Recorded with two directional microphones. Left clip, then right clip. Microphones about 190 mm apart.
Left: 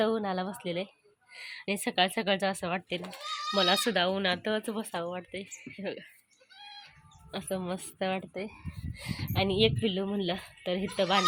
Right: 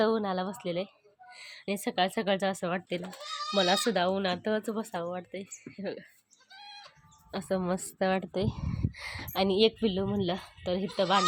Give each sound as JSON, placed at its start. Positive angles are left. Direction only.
{"t": 0.0, "sound": "speech", "side_deg": -5}
{"t": 7.3, "sound": "a woman's voice", "side_deg": -10}
{"t": 8.3, "sound": "speech", "side_deg": -35}
{"t": 9.0, "sound": "a woman's voice", "side_deg": -10}